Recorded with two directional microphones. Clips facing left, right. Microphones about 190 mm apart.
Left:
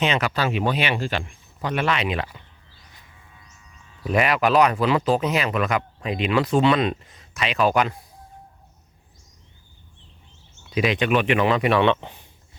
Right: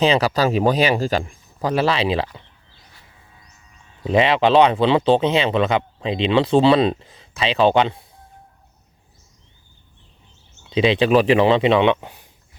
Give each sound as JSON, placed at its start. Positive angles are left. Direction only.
{"t": 0.0, "sound": "speech", "side_deg": -35}
{"t": 4.0, "sound": "speech", "side_deg": -25}
{"t": 10.7, "sound": "speech", "side_deg": -30}